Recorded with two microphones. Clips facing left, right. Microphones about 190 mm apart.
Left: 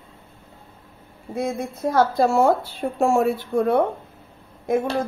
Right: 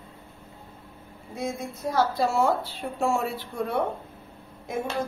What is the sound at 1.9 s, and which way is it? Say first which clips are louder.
A woman's voice: left 6 dB; 50° left (ahead or behind).